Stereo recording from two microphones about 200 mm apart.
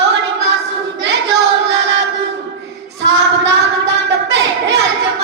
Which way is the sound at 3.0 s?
60° right (ahead or behind).